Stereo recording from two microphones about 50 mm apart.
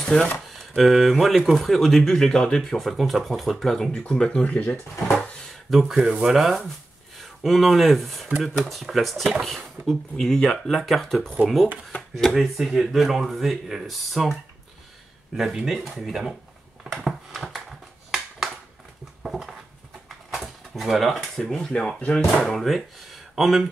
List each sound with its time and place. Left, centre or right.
0.0 s speech: centre
0.5 s speech: centre
2.9 s speech: centre
4.2 s speech: centre
4.5 s speech: left
5.7 s speech: centre
5.9 s speech: centre
6.3 s speech: centre
15.3 s speech: centre
17.0 s a sound: centre
19.2 s dishes: centre
20.3 s a sound: centre
21.4 s speech: centre